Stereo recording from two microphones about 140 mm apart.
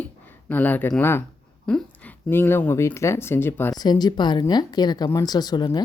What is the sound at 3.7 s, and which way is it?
Speech, 30° left (ahead or behind).